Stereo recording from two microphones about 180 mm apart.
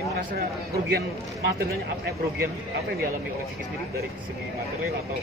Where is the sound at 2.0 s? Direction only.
60° right (ahead or behind).